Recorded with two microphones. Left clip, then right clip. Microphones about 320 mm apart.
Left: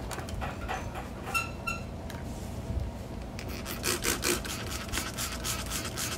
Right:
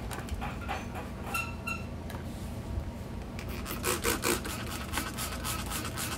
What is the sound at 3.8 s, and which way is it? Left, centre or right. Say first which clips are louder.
Rub: even; centre.